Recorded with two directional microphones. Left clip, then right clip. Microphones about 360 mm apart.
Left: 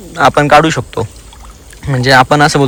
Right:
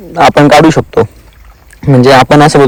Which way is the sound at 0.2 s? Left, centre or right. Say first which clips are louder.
Right 4 dB; centre.